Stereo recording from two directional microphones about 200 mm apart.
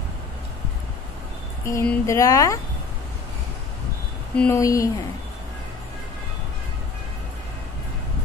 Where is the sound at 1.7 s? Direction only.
15° left (ahead or behind).